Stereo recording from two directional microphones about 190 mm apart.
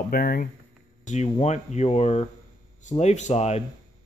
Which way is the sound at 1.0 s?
35° left (ahead or behind).